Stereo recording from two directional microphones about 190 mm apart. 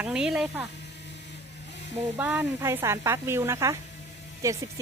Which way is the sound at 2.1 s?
10° right (ahead or behind).